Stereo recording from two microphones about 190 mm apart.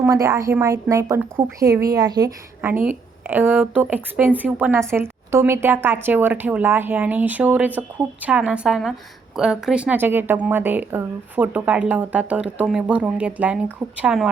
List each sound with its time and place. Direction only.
0.0 s speech: 15° right (ahead or behind)
2.8 s a woman's voice: 10° right (ahead or behind)